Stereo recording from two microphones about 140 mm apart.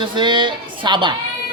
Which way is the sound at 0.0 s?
35° right (ahead or behind).